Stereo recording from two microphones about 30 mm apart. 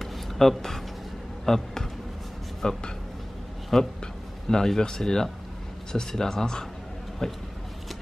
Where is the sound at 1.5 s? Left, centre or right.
Centre.